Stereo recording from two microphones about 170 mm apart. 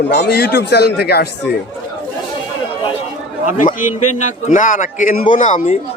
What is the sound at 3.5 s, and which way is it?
A man's voice, 50° left (ahead or behind).